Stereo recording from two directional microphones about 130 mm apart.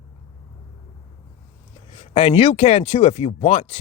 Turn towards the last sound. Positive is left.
turn(degrees=55)  # may be behind; listen again after turning